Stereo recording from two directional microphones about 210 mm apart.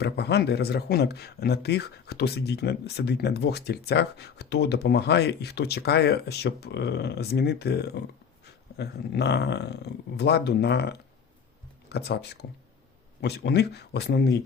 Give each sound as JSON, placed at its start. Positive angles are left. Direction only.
{"t": 0.0, "sound": "speech", "side_deg": 50}